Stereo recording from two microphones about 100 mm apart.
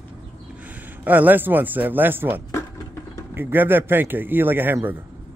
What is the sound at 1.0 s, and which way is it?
Speech, 15° right (ahead or behind).